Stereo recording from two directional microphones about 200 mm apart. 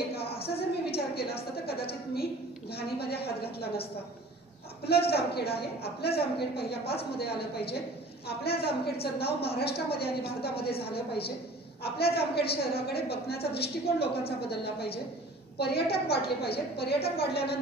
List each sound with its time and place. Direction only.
0.6 s a sound: 55° left (ahead or behind)
2.7 s a woman's voice: 50° left (ahead or behind)
5.1 s a woman's voice: 50° left (ahead or behind)